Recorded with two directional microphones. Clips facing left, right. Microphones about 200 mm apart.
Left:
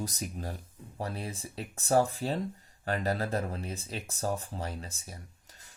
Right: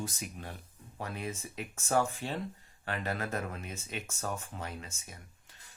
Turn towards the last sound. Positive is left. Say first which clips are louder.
# left 4 dB
turn(degrees=35)  # may be behind; listen again after turning